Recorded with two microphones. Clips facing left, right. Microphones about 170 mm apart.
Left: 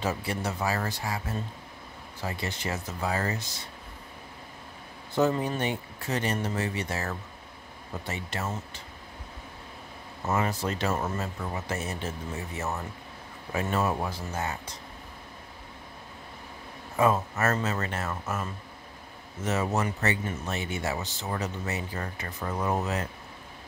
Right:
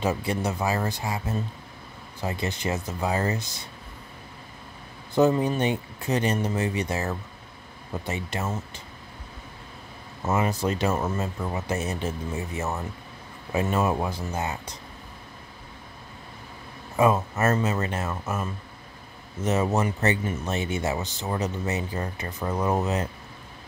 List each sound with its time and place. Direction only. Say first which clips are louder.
0.0 s speech: right 4 dB; 20° right (ahead or behind)
5.1 s speech: right 5 dB; 15° right (ahead or behind)
10.2 s speech: right 3 dB; 20° right (ahead or behind)
16.9 s speech: right 3 dB; 15° right (ahead or behind)
19.4 s speech: right 4 dB; 20° right (ahead or behind)